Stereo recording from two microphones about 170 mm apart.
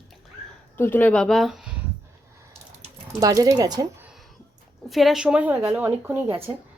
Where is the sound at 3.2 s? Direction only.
20° right (ahead or behind).